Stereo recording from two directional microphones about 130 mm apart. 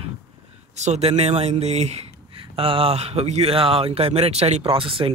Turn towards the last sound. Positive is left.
turn(degrees=-45)  # may be behind; listen again after turning